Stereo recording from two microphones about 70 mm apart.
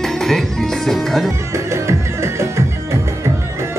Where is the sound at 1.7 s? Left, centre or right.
Right.